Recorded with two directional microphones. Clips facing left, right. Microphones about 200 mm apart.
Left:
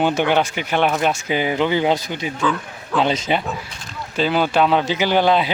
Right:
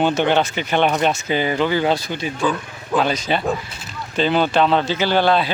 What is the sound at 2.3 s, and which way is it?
Speech, 20° right (ahead or behind).